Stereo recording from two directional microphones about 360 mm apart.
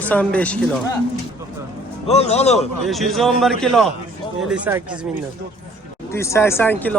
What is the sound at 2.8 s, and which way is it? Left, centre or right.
Speech, centre.